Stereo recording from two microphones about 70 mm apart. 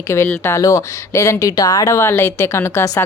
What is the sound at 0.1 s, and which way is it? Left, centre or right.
Speech, left.